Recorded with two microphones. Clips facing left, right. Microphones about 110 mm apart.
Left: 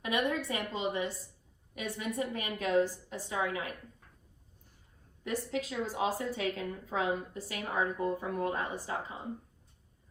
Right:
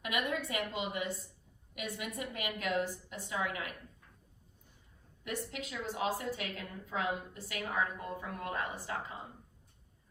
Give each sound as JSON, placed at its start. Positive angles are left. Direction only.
{"t": 0.0, "sound": "a woman's voice", "side_deg": 30}
{"t": 5.2, "sound": "a woman's voice", "side_deg": 35}